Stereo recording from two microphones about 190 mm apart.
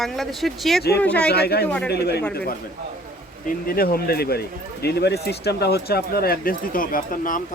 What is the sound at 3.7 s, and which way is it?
Speech, 55° left (ahead or behind).